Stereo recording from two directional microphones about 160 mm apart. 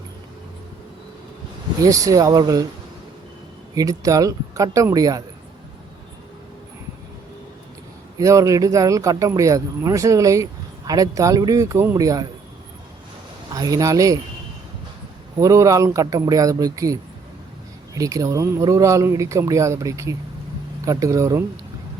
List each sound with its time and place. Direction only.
1.8 s speech: 20° right (ahead or behind)
3.8 s speech: 20° right (ahead or behind)
8.2 s speech: 20° right (ahead or behind)
13.5 s speech: 20° right (ahead or behind)
15.4 s speech: 20° right (ahead or behind)